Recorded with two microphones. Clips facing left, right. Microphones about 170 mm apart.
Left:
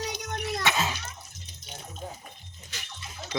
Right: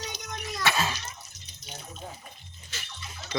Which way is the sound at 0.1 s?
60° left (ahead or behind).